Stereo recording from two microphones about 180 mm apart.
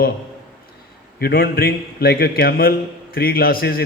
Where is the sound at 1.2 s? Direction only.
55° left (ahead or behind).